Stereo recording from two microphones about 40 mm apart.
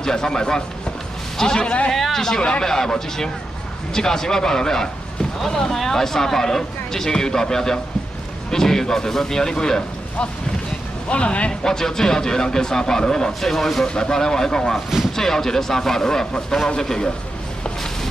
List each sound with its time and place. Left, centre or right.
0.0 s speech: centre
1.6 s speech: left
1.9 s speech: centre
11.1 s speech: left
11.6 s speech: centre
13.8 s speech: left